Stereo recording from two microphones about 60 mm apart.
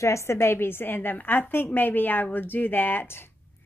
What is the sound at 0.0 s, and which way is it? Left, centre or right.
Speech, left.